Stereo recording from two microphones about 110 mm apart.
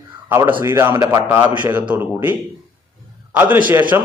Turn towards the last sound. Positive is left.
turn(degrees=-15)  # may be behind; listen again after turning